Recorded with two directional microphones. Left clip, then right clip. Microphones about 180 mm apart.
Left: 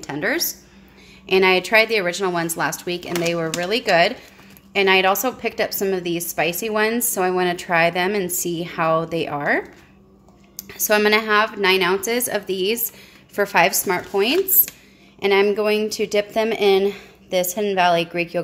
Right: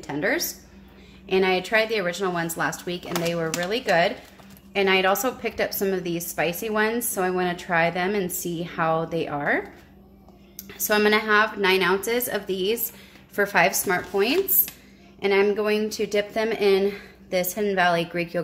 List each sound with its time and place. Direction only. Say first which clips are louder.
0.0 s speech: left 2 dB; 25° left (ahead or behind)
1.2 s a woman's voice: left 6 dB; 35° left (ahead or behind)
10.7 s a woman's voice: left 4 dB; 20° left (ahead or behind)